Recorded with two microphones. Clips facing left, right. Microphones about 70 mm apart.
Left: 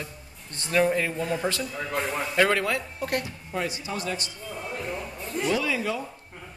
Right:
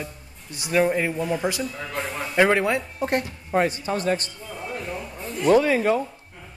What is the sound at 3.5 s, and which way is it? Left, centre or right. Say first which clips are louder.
Speech: right 8 dB; right.